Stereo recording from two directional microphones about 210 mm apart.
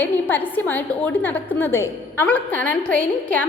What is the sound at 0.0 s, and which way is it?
A woman's voice, 10° left (ahead or behind).